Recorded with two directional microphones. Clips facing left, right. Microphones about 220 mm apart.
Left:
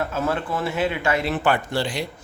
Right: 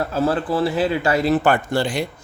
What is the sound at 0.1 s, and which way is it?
Speech, 35° right (ahead or behind).